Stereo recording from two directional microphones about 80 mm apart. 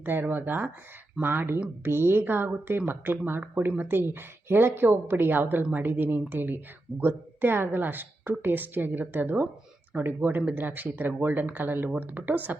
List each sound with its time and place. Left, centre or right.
0.0 s speech: right